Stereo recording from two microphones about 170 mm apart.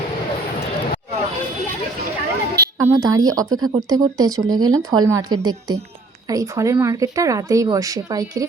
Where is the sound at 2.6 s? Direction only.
15° right (ahead or behind).